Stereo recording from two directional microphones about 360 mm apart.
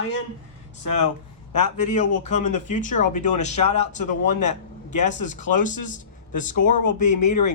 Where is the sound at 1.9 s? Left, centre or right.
Centre.